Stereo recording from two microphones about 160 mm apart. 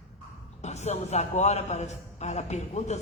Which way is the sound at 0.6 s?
45° left (ahead or behind).